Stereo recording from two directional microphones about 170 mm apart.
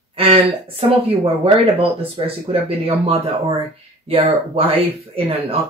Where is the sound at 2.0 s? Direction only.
35° right (ahead or behind).